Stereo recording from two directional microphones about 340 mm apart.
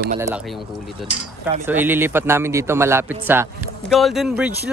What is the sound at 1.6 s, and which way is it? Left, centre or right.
Speech, centre.